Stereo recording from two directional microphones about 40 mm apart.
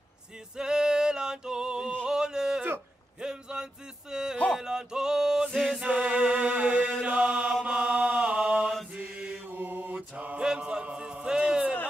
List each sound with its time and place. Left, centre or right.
0.6 s male singing: centre
2.0 s a sound: centre
4.6 s music: centre
5.8 s music: right
7.0 s chant: right
8.9 s mantra: right
9.5 s mantra: right
10.1 s chant: right
10.4 s music: right